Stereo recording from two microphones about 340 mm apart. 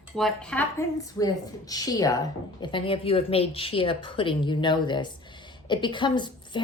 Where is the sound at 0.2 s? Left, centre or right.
Centre.